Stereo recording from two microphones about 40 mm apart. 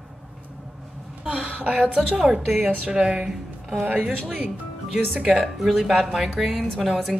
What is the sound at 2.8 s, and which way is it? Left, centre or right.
Speech, right.